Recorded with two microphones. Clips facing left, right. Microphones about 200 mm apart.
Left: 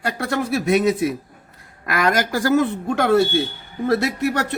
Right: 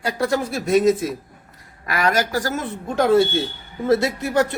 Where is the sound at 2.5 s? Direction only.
65° left (ahead or behind).